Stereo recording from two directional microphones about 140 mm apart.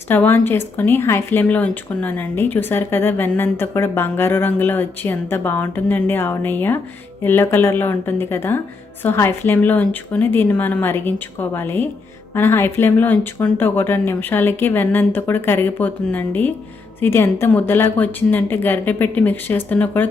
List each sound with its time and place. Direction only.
0.1 s speech: 15° left (ahead or behind)